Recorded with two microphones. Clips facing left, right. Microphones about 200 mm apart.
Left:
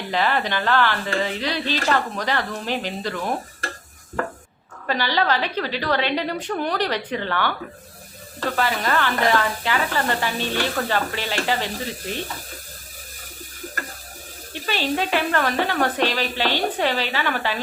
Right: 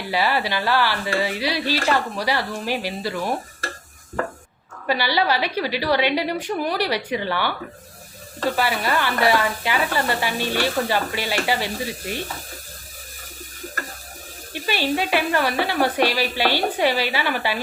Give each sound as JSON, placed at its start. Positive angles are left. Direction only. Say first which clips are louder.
{"t": 0.1, "sound": "speech", "louder": "even", "side_deg": -10}
{"t": 4.9, "sound": "speech", "louder": "right 1 dB", "side_deg": -10}
{"t": 8.5, "sound": "speech", "louder": "left 2 dB", "side_deg": -10}
{"t": 14.5, "sound": "speech", "louder": "right 1 dB", "side_deg": -10}